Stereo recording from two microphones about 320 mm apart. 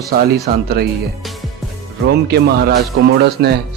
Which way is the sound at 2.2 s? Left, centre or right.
Right.